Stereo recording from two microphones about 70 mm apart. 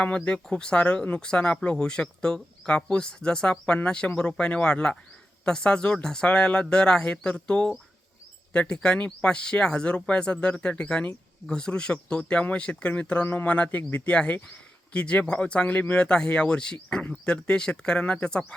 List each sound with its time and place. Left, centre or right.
0.0 s speech: centre